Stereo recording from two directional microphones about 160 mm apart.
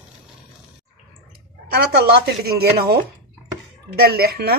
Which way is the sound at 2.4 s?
80° right.